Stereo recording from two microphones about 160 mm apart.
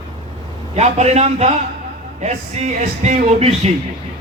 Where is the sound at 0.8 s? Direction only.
45° right (ahead or behind).